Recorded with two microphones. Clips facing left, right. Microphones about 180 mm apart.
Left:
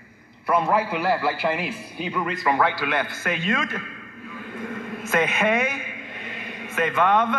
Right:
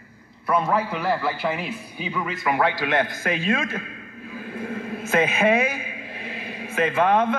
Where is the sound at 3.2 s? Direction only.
30° right (ahead or behind).